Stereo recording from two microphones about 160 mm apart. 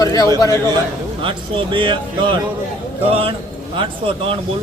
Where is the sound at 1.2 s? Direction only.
30° right (ahead or behind).